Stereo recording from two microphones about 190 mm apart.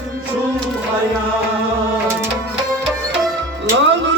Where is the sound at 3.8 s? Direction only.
70° right (ahead or behind).